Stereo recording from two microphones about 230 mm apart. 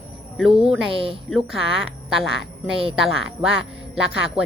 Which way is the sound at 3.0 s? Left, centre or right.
Centre.